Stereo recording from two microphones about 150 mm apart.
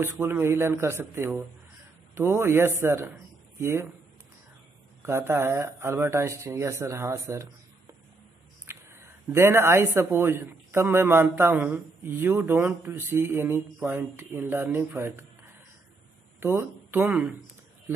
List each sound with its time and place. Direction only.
0.0 s speech: 15° right (ahead or behind)
5.0 s speech: 15° right (ahead or behind)
8.6 s speech: 15° right (ahead or behind)
16.3 s speech: 15° right (ahead or behind)